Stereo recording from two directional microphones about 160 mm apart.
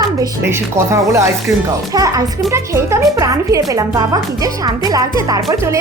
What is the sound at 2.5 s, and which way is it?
A woman's voice, 15° right (ahead or behind).